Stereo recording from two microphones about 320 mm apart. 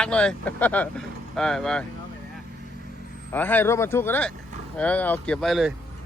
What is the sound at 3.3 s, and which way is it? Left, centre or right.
Speech, centre.